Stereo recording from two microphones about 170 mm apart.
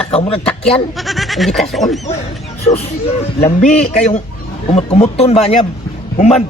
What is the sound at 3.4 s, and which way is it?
A man's voice, 40° left (ahead or behind).